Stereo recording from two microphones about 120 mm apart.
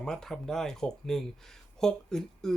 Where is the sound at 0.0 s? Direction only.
5° left (ahead or behind).